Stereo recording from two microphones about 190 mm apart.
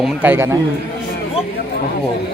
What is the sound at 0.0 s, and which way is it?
Speech, 10° right (ahead or behind).